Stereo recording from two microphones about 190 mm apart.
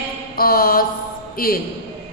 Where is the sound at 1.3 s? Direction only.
50° left (ahead or behind).